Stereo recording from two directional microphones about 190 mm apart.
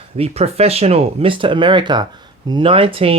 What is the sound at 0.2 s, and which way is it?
Speech, 35° right (ahead or behind).